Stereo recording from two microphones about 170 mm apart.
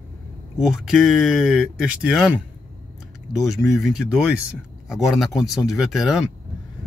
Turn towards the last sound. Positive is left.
turn(degrees=0)  # may be behind; listen again after turning